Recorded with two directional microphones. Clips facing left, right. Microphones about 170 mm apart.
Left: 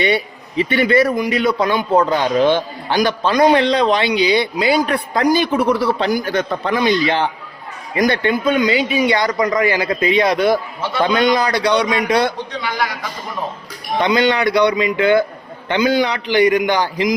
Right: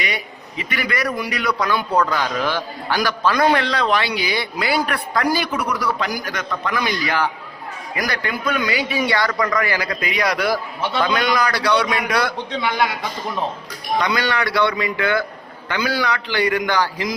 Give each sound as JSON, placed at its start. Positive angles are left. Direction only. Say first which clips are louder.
{"t": 0.0, "sound": "a man's voice", "louder": "left 10 dB", "side_deg": 30}
{"t": 12.7, "sound": "a man's voice", "louder": "even", "side_deg": -25}
{"t": 14.0, "sound": "a man's voice", "louder": "left 8 dB", "side_deg": 20}